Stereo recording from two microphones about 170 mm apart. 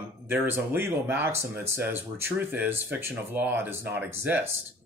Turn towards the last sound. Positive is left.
turn(degrees=-15)  # may be behind; listen again after turning